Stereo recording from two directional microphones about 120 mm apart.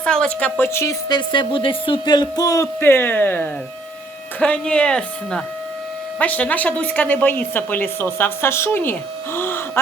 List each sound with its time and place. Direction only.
0.0 s a woman's voice: 5° left (ahead or behind)
1.0 s speech: 40° left (ahead or behind)
2.8 s a woman's voice: 20° left (ahead or behind)